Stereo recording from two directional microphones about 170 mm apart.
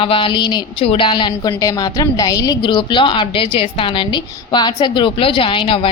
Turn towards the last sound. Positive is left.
turn(degrees=30)  # may be behind; listen again after turning